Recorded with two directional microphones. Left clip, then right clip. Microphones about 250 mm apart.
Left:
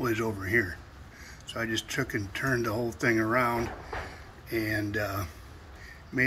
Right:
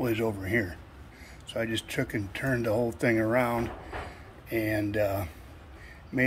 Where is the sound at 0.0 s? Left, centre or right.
Centre.